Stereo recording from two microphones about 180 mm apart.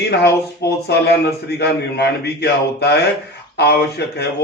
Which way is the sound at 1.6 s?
65° left (ahead or behind).